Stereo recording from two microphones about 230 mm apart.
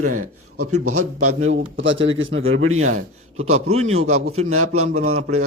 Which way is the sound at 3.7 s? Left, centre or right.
Right.